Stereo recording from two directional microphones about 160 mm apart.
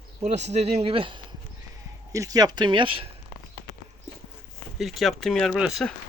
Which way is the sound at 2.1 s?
20° right (ahead or behind).